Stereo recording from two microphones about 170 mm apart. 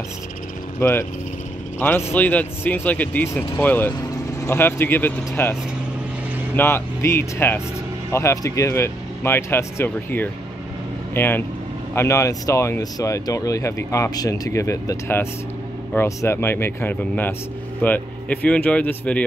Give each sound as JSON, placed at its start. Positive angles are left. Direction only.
{"t": 0.7, "sound": "speech", "side_deg": 15}